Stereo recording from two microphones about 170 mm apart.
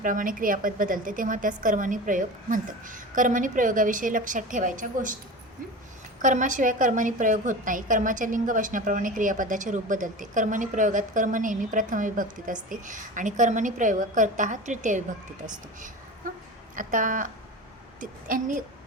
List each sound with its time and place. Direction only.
0.0 s a woman's voice: 50° right (ahead or behind)
6.2 s a woman's voice: 50° right (ahead or behind)